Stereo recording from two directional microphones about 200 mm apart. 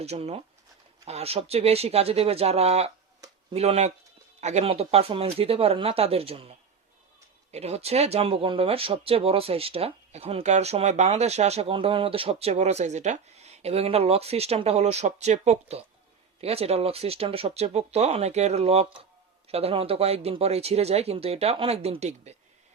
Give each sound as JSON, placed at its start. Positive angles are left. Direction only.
{"t": 0.0, "sound": "speech", "side_deg": -30}